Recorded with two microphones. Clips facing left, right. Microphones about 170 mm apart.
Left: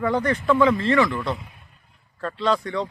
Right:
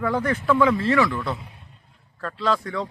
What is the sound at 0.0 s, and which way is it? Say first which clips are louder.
A man's voice: left 1 dB; centre (ahead or behind).